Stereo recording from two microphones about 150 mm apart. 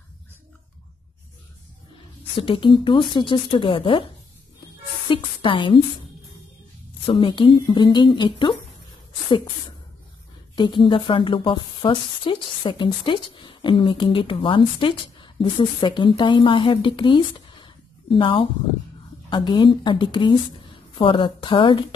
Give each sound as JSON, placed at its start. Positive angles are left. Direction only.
{"t": 2.3, "sound": "a woman's voice", "side_deg": 35}
{"t": 5.1, "sound": "a woman's voice", "side_deg": 35}
{"t": 7.1, "sound": "a woman's voice", "side_deg": 35}
{"t": 10.5, "sound": "a woman's voice", "side_deg": 30}